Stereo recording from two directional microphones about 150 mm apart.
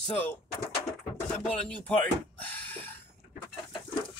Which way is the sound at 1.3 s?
5° left (ahead or behind).